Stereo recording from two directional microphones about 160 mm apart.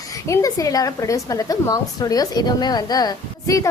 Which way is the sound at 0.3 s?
20° left (ahead or behind).